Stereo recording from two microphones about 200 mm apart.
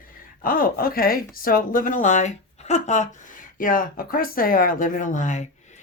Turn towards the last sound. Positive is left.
turn(degrees=40)  # may be behind; listen again after turning